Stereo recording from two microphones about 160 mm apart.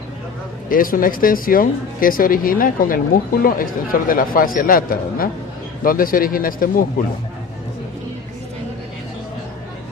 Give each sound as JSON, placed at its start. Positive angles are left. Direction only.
{"t": 0.7, "sound": "speech", "side_deg": 60}